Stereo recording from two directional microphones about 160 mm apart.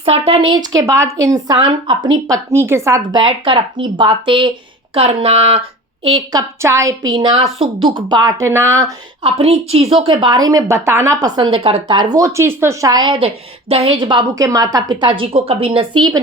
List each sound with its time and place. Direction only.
0.0 s a woman's voice: 35° right (ahead or behind)
6.3 s a woman's voice: 20° right (ahead or behind)
9.2 s a woman's voice: 40° right (ahead or behind)